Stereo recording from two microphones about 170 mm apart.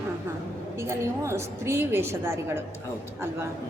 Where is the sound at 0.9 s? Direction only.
15° right (ahead or behind).